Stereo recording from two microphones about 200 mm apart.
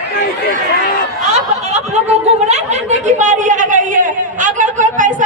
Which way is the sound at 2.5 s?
35° right (ahead or behind).